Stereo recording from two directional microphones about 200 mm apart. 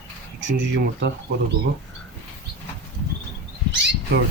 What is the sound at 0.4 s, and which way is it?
Speech, 65° right (ahead or behind).